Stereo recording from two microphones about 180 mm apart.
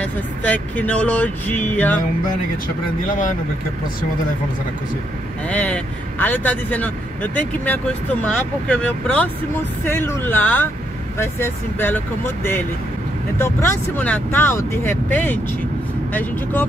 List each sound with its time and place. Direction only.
0.0 s speech: 10° left (ahead or behind)
3.1 s speech: 45° left (ahead or behind)
5.5 s speech: 10° left (ahead or behind)